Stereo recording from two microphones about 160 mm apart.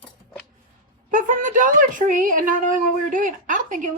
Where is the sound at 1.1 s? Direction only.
55° right (ahead or behind).